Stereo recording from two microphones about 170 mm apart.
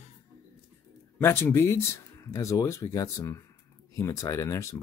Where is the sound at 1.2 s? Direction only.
15° left (ahead or behind).